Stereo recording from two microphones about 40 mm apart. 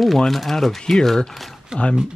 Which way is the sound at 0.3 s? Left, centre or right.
Centre.